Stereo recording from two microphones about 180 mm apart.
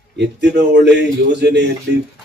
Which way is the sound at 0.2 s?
70° right (ahead or behind).